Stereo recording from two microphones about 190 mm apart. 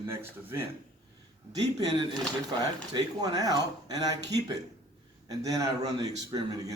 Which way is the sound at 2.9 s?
20° right (ahead or behind).